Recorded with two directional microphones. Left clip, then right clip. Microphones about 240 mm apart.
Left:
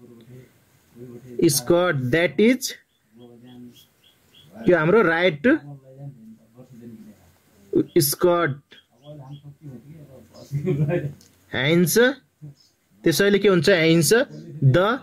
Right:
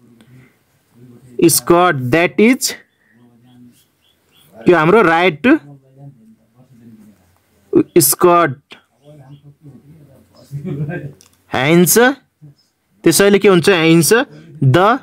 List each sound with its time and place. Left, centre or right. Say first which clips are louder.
1.4 s speech: right 8 dB; right
4.6 s speech: right 7 dB; right
7.7 s speech: right 8 dB; right
11.4 s speech: right 8 dB; right